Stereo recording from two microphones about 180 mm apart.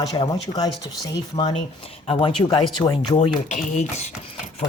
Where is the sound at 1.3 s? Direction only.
35° left (ahead or behind).